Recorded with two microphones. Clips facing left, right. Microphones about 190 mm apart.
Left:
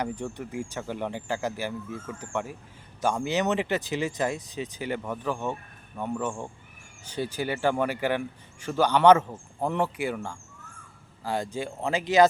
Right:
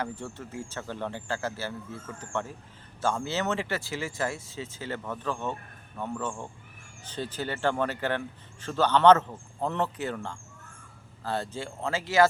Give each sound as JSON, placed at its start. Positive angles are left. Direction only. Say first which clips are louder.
{"t": 0.0, "sound": "speech", "louder": "left 4 dB", "side_deg": 15}